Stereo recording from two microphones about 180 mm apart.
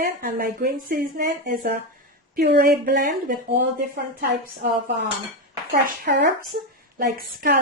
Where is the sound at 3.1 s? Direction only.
50° right (ahead or behind).